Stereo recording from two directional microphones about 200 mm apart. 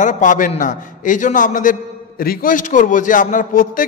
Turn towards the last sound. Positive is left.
turn(degrees=40)  # may be behind; listen again after turning